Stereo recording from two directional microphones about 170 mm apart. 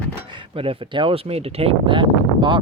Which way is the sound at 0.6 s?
30° right (ahead or behind).